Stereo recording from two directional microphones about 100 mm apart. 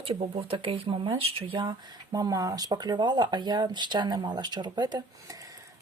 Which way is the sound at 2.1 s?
40° right (ahead or behind).